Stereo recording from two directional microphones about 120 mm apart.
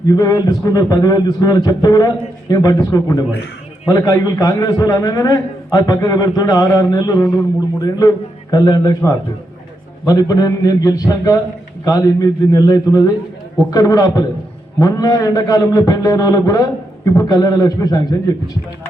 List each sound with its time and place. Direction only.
0.1 s a man's voice: 30° left (ahead or behind)
10.1 s a man's voice: 30° left (ahead or behind)